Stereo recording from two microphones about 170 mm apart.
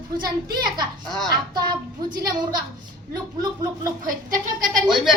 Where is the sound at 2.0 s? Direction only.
25° right (ahead or behind).